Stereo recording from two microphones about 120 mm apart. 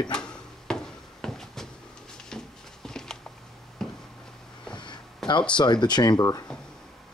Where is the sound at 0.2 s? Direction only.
5° left (ahead or behind).